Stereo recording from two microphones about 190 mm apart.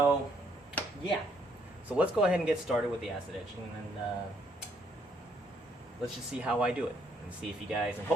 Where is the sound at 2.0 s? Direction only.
5° right (ahead or behind).